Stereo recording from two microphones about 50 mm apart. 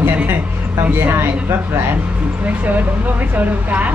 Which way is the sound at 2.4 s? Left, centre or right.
Right.